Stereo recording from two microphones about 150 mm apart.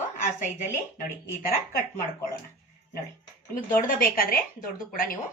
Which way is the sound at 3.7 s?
70° left (ahead or behind).